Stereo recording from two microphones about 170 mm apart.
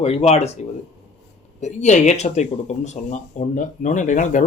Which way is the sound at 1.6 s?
45° left (ahead or behind).